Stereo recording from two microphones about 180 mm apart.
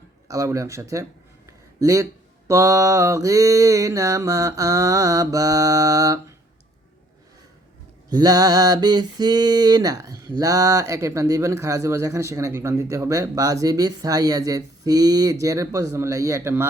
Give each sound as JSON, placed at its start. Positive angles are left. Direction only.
{"t": 0.3, "sound": "mantra", "side_deg": -15}
{"t": 8.1, "sound": "mantra", "side_deg": -20}